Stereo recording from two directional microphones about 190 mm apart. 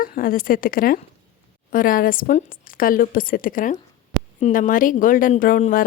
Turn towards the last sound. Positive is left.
turn(degrees=45)  # may be behind; listen again after turning